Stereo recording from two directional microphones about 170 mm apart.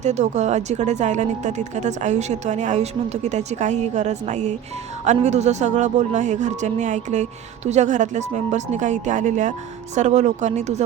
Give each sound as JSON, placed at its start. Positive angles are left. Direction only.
{"t": 0.0, "sound": "speech", "side_deg": -45}